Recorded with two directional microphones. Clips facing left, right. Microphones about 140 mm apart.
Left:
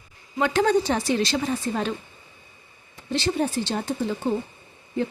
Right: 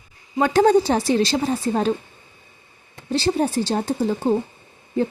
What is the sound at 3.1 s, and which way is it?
Speech, 35° right (ahead or behind).